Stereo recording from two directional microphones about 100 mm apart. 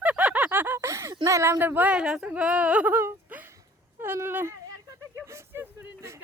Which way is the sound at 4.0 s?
25° right (ahead or behind).